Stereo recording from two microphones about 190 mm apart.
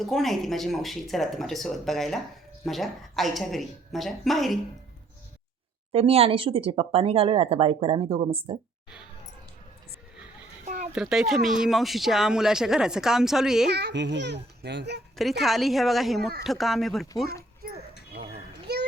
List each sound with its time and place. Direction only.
0.0 s speech: centre (ahead or behind)
5.9 s speech: 30° right (ahead or behind)
10.9 s speech: centre (ahead or behind)
13.7 s a child's voice: 60° right (ahead or behind)
15.1 s speech: centre (ahead or behind)
18.1 s children playing: 60° right (ahead or behind)
18.7 s a sound: 60° right (ahead or behind)